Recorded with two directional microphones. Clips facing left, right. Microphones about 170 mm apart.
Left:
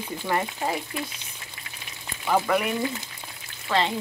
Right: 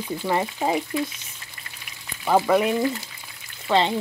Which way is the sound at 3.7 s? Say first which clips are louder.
Right 4 dB; 25° right (ahead or behind).